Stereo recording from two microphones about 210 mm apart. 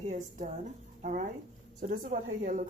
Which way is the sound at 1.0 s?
35° right (ahead or behind).